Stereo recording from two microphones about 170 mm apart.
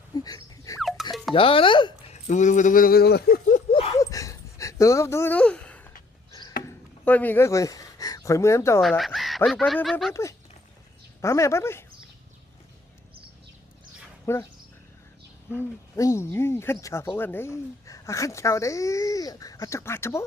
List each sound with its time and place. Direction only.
0.2 s a sound: 20° left (ahead or behind)
0.8 s music: centre (ahead or behind)
1.3 s speech: 30° left (ahead or behind)
2.2 s speech: 45° left (ahead or behind); by 3.6 s 65° left (ahead or behind)
3.7 s a sound: 35° left (ahead or behind)
4.0 s a sound: 20° left (ahead or behind)
7.0 s speech: 10° left (ahead or behind)
8.8 s speech: centre (ahead or behind)
10.1 s speech: 15° left (ahead or behind)
14.3 s speech: 15° left (ahead or behind)
15.4 s speech: 15° left (ahead or behind)